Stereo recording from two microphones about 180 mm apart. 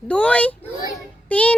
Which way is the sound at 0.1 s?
5° left (ahead or behind).